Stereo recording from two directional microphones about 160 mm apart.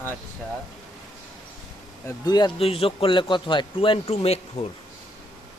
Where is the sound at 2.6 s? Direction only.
35° left (ahead or behind).